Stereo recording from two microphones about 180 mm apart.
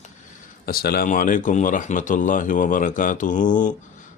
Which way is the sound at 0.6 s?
60° left (ahead or behind).